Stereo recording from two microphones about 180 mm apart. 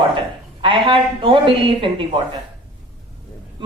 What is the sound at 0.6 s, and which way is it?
A woman's voice, 30° right (ahead or behind).